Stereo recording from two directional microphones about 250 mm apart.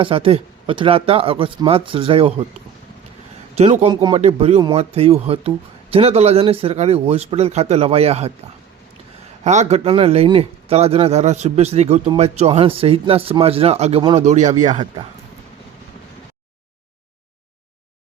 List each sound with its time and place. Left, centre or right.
0.0 s speech: right
3.6 s speech: right
9.4 s speech: right